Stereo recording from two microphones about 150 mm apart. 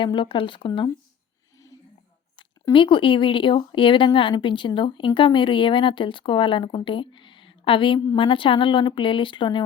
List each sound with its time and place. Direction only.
0.0 s a woman's voice: 35° left (ahead or behind)
2.7 s a woman's voice: 35° left (ahead or behind)